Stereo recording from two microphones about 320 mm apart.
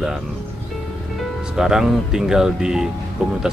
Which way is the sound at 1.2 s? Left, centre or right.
Centre.